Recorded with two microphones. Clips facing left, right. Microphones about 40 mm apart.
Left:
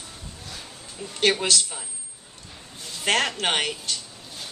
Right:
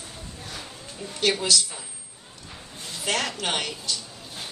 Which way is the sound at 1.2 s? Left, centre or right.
Left.